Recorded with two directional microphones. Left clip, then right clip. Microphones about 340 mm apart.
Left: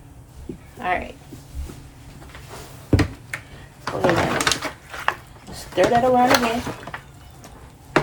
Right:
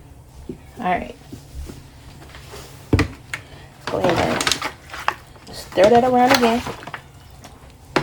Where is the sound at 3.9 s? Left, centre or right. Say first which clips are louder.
Right 1 dB; centre.